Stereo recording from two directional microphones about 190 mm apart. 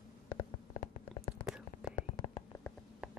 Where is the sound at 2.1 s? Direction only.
30° left (ahead or behind).